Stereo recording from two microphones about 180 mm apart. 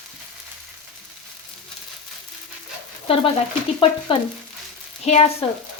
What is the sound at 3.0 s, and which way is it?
Speech, 30° left (ahead or behind).